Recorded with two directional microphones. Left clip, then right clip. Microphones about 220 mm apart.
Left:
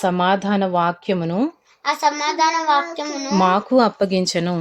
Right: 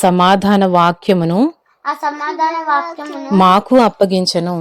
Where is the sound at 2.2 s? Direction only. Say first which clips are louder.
Right 1 dB; 60° left (ahead or behind).